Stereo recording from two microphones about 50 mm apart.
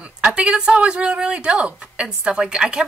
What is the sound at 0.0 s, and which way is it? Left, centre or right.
A woman's voice, right.